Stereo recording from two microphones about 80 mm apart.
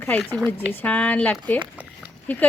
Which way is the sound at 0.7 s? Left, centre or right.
Centre.